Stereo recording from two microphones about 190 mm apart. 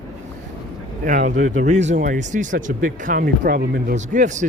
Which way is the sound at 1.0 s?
45° right (ahead or behind).